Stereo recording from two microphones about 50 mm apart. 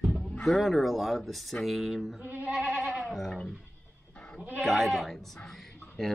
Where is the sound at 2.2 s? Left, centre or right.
Right.